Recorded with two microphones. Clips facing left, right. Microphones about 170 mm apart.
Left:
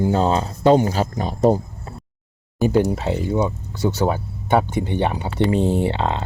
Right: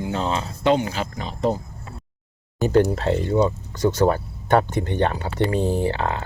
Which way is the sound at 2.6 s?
10° left (ahead or behind).